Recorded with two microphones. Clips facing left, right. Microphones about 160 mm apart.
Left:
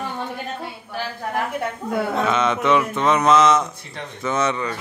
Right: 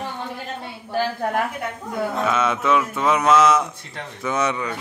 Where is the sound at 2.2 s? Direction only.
5° right (ahead or behind).